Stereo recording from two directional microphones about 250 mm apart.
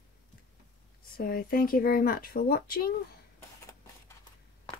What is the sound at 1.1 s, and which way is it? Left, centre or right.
Speech, left.